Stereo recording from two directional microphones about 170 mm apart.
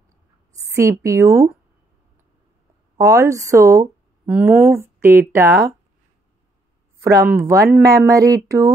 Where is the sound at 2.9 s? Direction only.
15° right (ahead or behind).